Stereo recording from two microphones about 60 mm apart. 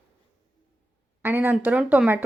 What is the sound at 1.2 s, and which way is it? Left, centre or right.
Speech, right.